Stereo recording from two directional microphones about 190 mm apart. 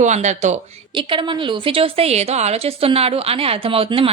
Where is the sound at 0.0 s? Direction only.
40° right (ahead or behind).